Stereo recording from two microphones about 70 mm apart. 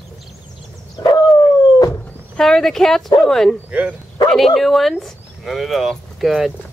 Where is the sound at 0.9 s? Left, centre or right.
Left.